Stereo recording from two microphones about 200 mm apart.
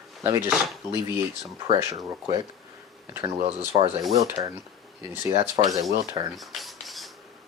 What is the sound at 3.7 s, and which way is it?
Speech, 25° right (ahead or behind).